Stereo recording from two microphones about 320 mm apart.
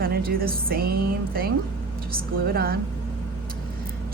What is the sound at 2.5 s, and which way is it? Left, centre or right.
Speech, right.